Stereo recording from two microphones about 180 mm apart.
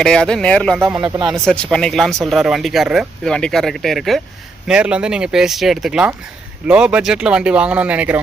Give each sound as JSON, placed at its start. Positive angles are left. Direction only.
{"t": 0.0, "sound": "speech", "side_deg": 5}
{"t": 0.8, "sound": "speech", "side_deg": -10}
{"t": 1.0, "sound": "speech", "side_deg": -25}
{"t": 1.5, "sound": "speech", "side_deg": 5}